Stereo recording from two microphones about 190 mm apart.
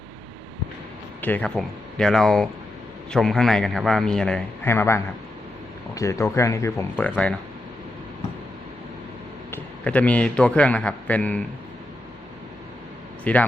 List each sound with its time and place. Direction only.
1.2 s a man's voice: 10° left (ahead or behind)
9.5 s a man's voice: 5° left (ahead or behind)
13.3 s speech: 5° left (ahead or behind)